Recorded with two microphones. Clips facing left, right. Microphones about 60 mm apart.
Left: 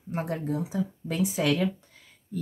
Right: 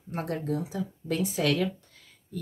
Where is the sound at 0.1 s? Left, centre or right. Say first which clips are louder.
Left 1 dB; centre.